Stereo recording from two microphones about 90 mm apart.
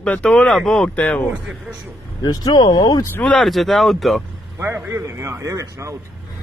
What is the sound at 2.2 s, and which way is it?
Speech, 45° left (ahead or behind).